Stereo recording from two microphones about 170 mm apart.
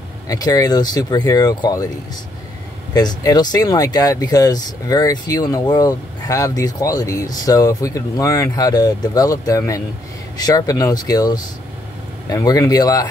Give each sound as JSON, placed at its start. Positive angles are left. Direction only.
{"t": 0.3, "sound": "speech", "side_deg": 20}
{"t": 2.9, "sound": "speech", "side_deg": 25}